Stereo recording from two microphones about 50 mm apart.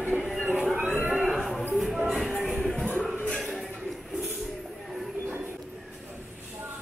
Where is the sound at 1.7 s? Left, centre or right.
Centre.